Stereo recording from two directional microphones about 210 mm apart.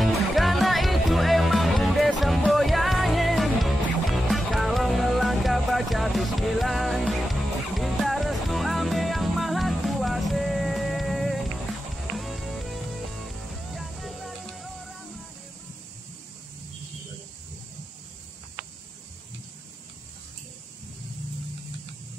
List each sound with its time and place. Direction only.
0.0 s music: centre (ahead or behind)